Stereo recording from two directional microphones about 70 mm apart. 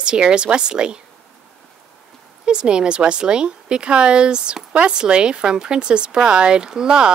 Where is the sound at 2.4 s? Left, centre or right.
Centre.